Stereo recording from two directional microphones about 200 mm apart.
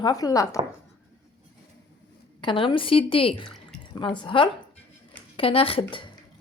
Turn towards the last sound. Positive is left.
turn(degrees=30)  # may be behind; listen again after turning